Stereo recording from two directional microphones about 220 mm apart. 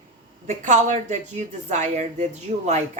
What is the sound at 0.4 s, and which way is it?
Speech, 35° right (ahead or behind).